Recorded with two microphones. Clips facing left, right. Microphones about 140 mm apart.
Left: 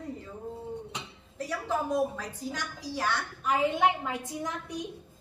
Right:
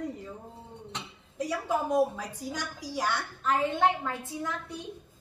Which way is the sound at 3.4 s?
10° left (ahead or behind).